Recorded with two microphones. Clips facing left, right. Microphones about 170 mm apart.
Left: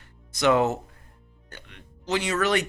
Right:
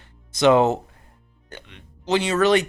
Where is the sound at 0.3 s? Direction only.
25° right (ahead or behind).